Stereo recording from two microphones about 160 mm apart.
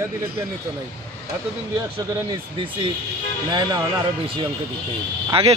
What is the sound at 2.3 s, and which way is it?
Speech, 35° right (ahead or behind).